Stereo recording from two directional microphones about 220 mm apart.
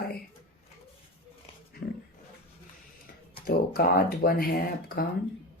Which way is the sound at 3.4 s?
45° left (ahead or behind).